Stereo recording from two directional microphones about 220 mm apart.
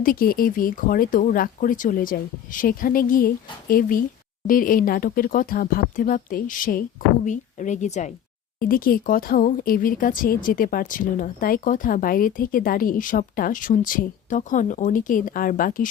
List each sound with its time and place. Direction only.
0.0 s speech: 40° left (ahead or behind)